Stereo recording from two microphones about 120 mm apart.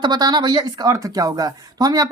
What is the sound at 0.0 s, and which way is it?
A woman's voice, 35° right (ahead or behind).